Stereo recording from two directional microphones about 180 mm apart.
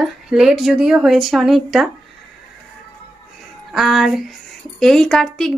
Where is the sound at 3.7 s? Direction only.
Centre (ahead or behind).